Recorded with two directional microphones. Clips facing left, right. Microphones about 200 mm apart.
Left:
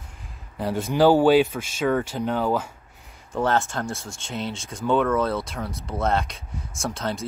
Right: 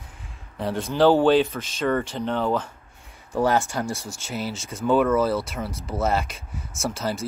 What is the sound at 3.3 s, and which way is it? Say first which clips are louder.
Speech: right 1 dB; 10° right (ahead or behind).